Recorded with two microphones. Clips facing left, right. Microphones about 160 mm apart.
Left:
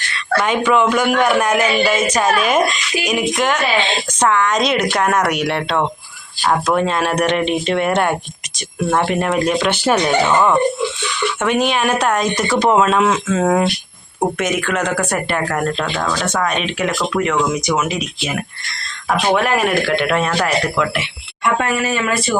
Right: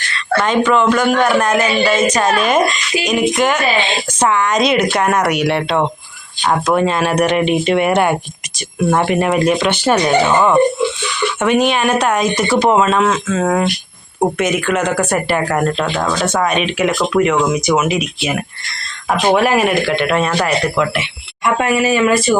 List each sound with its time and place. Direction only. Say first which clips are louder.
0.4 s speech: right 2 dB; 10° left (ahead or behind)
12.8 s speech: right 1 dB; 5° left (ahead or behind)
14.2 s speech: right 3 dB; 5° right (ahead or behind)